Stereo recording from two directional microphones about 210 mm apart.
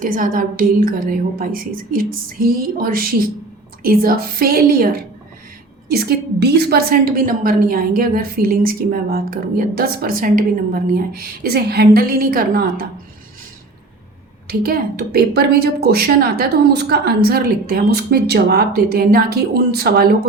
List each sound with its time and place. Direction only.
0.0 s a woman's voice: 40° right (ahead or behind)
14.4 s a woman's voice: 45° right (ahead or behind)